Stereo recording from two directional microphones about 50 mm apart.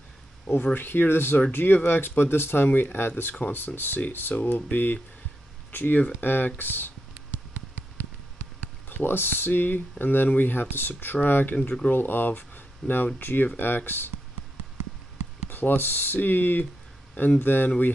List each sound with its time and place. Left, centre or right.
0.7 s speech: left
8.8 s speech: left
15.5 s speech: left